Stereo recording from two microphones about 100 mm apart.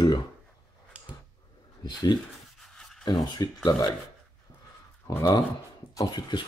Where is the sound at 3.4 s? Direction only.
40° left (ahead or behind).